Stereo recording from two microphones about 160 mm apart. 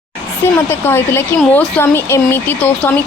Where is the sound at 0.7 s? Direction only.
15° left (ahead or behind).